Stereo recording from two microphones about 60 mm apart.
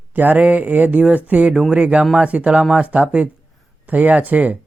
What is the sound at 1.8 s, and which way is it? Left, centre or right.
Speech, right.